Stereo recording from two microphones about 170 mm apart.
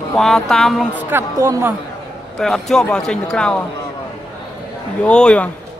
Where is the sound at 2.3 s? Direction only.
Centre (ahead or behind).